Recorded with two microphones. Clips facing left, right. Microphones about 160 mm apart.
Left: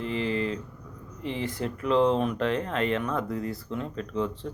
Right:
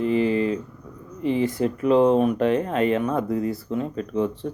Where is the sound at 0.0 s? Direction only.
15° right (ahead or behind).